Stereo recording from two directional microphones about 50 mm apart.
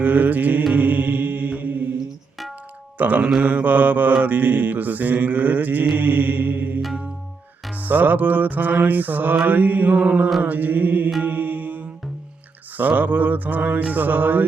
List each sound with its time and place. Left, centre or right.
0.0 s mantra: right
3.0 s mantra: right